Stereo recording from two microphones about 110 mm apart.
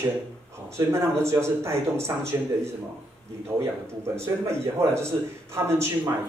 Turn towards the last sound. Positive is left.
turn(degrees=-25)  # may be behind; listen again after turning